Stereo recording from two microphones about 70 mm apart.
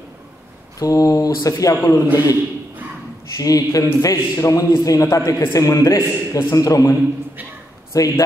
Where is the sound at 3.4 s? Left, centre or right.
Left.